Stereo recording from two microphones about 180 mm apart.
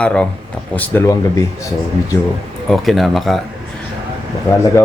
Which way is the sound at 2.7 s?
Centre (ahead or behind).